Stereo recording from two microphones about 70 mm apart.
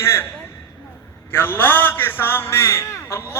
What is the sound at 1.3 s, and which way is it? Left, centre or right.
A man's voice, left.